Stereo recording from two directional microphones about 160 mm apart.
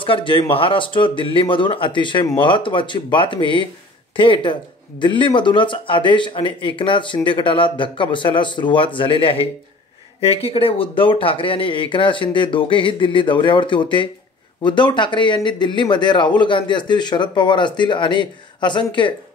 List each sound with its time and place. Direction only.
0.0 s speech: 35° left (ahead or behind)